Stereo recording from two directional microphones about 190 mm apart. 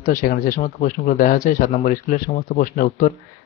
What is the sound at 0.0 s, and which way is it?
Speech, 45° left (ahead or behind).